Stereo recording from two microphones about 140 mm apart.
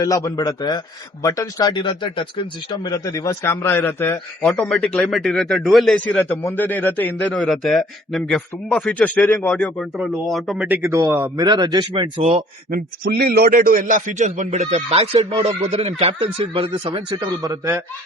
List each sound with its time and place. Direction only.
0.0 s speech: 25° left (ahead or behind)
4.5 s a man's voice: 5° left (ahead or behind)
6.2 s a man's voice: 15° left (ahead or behind)
7.3 s a man's voice: centre (ahead or behind)
10.0 s a man's voice: centre (ahead or behind)
10.7 s a man's voice: 20° right (ahead or behind)
12.7 s a man's voice: 90° right; by 17.7 s 25° right (ahead or behind)